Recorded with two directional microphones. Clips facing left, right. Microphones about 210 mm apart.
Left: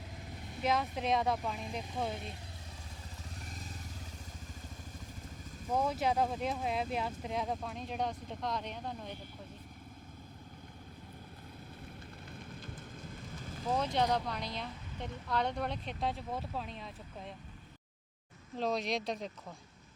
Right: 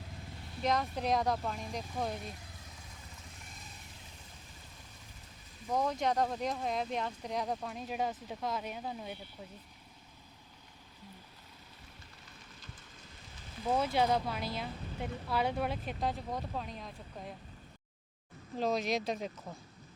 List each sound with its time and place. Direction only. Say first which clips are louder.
0.6 s speech: even; 5° left (ahead or behind)
5.7 s speech: even; 5° left (ahead or behind)
12.5 s fire: left 8 dB; 55° left (ahead or behind)
13.7 s speech: right 2 dB; 5° right (ahead or behind)
18.5 s speech: right 2 dB; centre (ahead or behind)